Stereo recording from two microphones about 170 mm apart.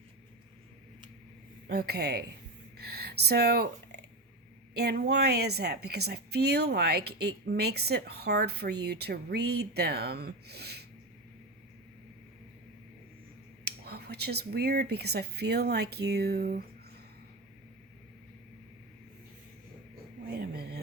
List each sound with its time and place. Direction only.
1.6 s a woman's voice: 70° right (ahead or behind)
13.7 s a woman's voice: 70° right (ahead or behind)
20.3 s a sound: 65° right (ahead or behind)